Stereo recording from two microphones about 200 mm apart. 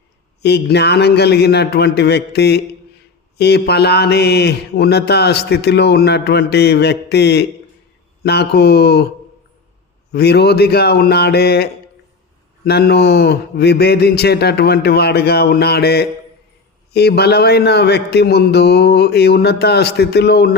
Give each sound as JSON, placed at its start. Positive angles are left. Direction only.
{"t": 0.4, "sound": "mantra", "side_deg": 55}
{"t": 10.1, "sound": "speech", "side_deg": 55}
{"t": 16.9, "sound": "mantra", "side_deg": 55}